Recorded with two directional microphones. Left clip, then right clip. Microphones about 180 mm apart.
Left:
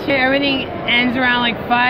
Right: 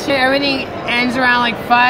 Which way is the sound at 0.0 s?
10° right (ahead or behind).